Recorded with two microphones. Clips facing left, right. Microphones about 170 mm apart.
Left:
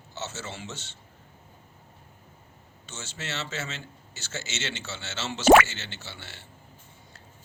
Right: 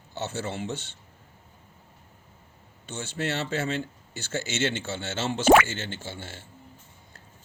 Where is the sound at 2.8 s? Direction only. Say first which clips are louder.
Right 8 dB; 55° right (ahead or behind).